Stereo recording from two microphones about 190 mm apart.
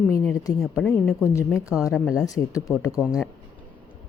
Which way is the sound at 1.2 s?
15° left (ahead or behind).